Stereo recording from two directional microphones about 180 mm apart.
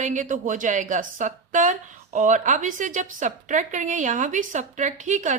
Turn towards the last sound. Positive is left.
turn(degrees=-45)  # may be behind; listen again after turning